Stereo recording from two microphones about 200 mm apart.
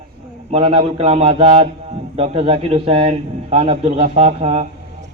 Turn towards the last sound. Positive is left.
turn(degrees=-30)  # may be behind; listen again after turning